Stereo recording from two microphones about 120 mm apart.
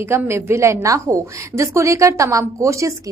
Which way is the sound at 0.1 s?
20° right (ahead or behind).